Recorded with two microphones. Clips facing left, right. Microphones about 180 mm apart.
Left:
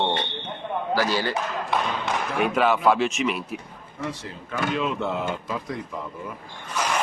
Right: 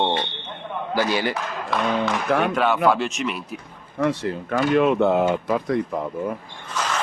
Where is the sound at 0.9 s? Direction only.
15° right (ahead or behind).